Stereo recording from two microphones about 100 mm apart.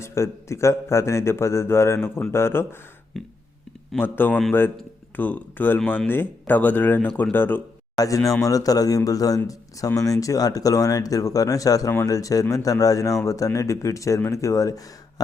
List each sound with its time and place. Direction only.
0.0 s speech: 30° left (ahead or behind)
3.1 s a sound: 5° left (ahead or behind)
3.9 s speech: 20° left (ahead or behind)
7.9 s speech: 35° left (ahead or behind)